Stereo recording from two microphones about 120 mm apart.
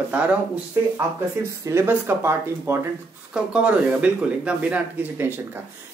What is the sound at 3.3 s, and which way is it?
Speech, 10° right (ahead or behind).